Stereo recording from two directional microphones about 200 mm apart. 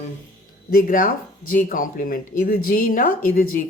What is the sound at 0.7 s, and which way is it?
Speech, 45° left (ahead or behind).